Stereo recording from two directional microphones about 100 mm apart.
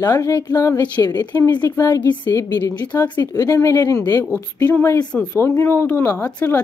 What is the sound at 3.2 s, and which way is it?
A woman's voice, 35° left (ahead or behind).